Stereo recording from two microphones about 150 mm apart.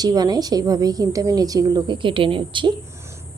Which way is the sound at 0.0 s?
25° right (ahead or behind).